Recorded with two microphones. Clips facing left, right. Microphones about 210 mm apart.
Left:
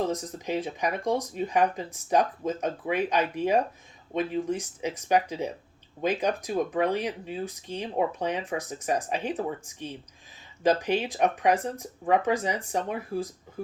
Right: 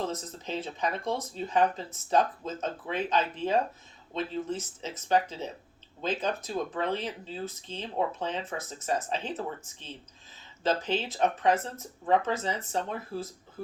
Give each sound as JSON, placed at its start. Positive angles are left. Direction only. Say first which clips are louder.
{"t": 0.0, "sound": "speech", "louder": "left 5 dB", "side_deg": 15}